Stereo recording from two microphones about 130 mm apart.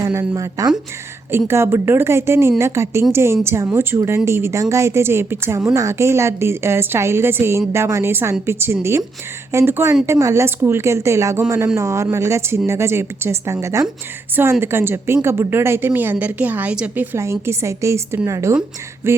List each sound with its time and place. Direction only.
0.0 s a woman's voice: 25° right (ahead or behind)